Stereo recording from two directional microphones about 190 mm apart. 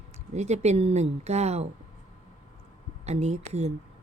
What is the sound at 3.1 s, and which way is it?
Speech, 35° right (ahead or behind).